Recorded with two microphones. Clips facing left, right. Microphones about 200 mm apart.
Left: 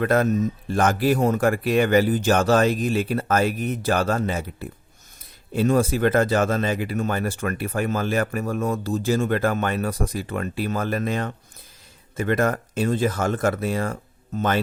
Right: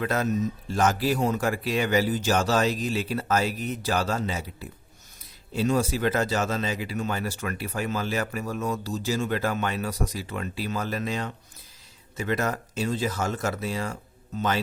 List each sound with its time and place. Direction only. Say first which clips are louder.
0.0 s speech: left 6 dB; 55° left (ahead or behind)